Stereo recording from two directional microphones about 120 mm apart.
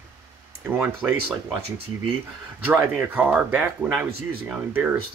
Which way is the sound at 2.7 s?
15° right (ahead or behind).